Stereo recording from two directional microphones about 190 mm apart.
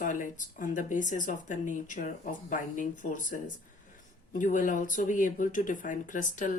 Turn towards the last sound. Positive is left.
turn(degrees=40)  # may be behind; listen again after turning